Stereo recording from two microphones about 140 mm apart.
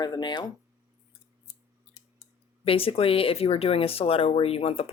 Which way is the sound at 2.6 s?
40° left (ahead or behind).